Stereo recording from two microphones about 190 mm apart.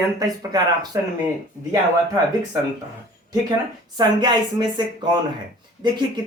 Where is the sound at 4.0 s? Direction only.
20° right (ahead or behind).